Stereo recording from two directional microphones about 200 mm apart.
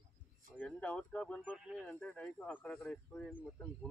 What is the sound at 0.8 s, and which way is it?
Speech, 5° left (ahead or behind).